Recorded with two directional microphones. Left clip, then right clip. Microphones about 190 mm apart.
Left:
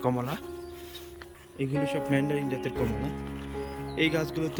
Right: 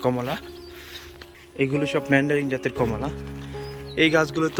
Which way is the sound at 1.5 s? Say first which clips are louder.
Right 6 dB; 5° left (ahead or behind).